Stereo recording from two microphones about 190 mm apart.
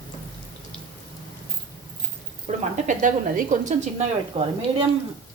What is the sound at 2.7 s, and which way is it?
A woman's voice, 40° right (ahead or behind).